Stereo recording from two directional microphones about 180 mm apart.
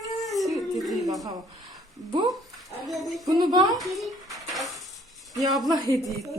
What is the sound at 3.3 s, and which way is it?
Speech, 20° right (ahead or behind).